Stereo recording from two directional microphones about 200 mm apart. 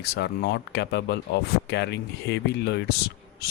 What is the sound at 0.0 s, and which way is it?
Speech, 55° left (ahead or behind).